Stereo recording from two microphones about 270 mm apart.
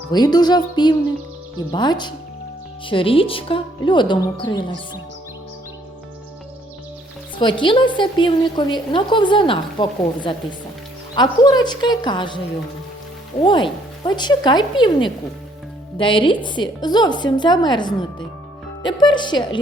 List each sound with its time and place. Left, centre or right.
0.1 s a woman's voice: centre
7.3 s a woman's voice: centre
13.4 s a woman's voice: centre